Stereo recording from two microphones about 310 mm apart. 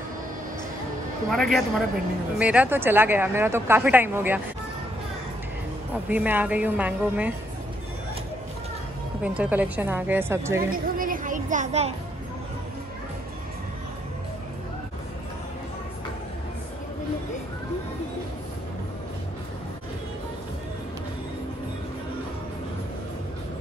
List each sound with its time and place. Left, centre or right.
1.3 s a woman's voice: centre
6.0 s speech: centre
9.2 s a woman's voice: centre
10.7 s speech: right